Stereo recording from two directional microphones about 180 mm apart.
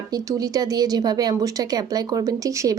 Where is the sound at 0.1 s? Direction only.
20° right (ahead or behind).